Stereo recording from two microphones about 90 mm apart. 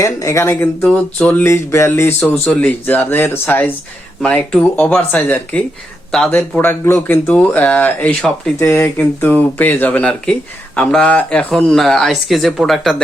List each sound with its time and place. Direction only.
0.0 s speech: 35° left (ahead or behind)
0.9 s speech: 15° left (ahead or behind)
1.5 s speech: 30° left (ahead or behind)
2.5 s speech: 15° left (ahead or behind)
6.6 s speech: 25° left (ahead or behind)
8.5 s speech: 30° left (ahead or behind); by 13.0 s centre (ahead or behind)